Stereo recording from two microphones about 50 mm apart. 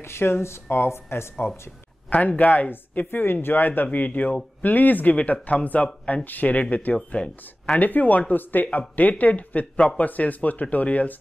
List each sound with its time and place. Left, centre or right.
0.1 s speech: left
2.0 s speech: left